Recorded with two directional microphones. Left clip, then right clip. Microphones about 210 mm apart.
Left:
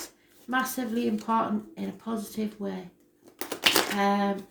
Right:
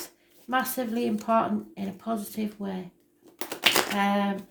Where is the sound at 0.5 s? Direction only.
40° right (ahead or behind).